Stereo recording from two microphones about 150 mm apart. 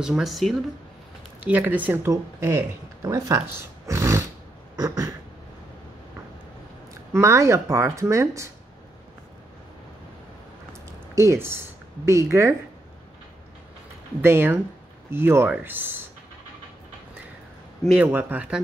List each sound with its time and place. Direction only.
0.0 s speech: centre (ahead or behind)
1.4 s speech: 10° right (ahead or behind)
7.1 s speech: 20° right (ahead or behind)
12.1 s speech: 20° right (ahead or behind)
14.2 s speech: 15° right (ahead or behind)
17.9 s speech: 10° right (ahead or behind)